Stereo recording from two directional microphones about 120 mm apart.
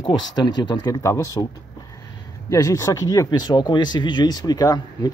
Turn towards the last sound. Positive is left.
turn(degrees=35)  # may be behind; listen again after turning